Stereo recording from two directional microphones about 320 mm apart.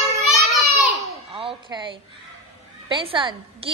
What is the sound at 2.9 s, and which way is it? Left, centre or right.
Speech, centre.